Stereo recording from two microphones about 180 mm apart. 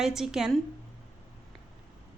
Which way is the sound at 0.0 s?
5° right (ahead or behind).